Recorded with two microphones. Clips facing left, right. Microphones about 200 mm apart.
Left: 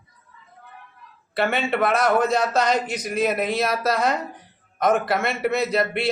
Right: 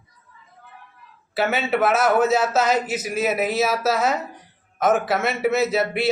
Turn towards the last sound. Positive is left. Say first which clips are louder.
# right 2 dB
turn(degrees=-5)  # may be behind; listen again after turning